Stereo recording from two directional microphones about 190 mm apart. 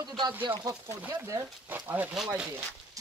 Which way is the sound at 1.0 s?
10° right (ahead or behind).